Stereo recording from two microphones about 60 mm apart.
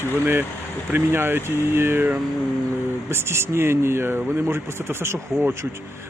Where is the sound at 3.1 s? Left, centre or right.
Right.